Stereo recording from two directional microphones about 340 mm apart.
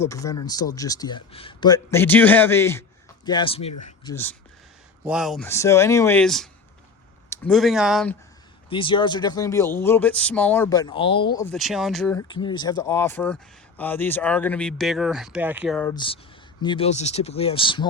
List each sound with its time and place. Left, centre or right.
0.0 s speech: centre
4.1 s speech: centre
8.7 s speech: centre
11.5 s speech: centre
12.3 s speech: centre